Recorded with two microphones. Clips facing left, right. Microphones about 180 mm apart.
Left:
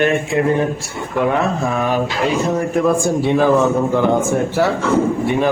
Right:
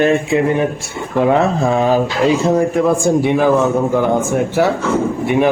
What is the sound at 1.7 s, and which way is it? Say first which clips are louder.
Speech: right 5 dB; 30° right (ahead or behind).